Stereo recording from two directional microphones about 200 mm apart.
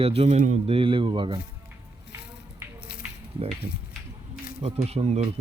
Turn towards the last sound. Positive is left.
turn(degrees=-30)  # may be behind; listen again after turning